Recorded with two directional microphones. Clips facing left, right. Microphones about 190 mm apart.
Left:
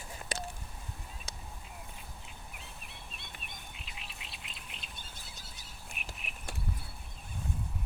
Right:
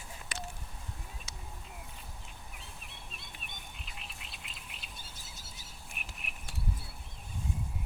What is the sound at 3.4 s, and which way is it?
Bird, centre (ahead or behind).